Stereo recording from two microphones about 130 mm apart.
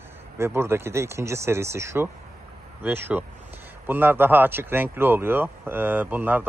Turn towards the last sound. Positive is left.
turn(degrees=-15)  # may be behind; listen again after turning